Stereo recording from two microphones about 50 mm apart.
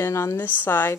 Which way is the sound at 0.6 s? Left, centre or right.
Left.